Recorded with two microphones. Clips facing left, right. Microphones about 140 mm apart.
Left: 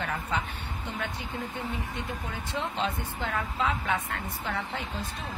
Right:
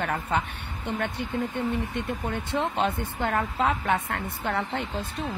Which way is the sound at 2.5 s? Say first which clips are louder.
Right 4 dB; 55° right (ahead or behind).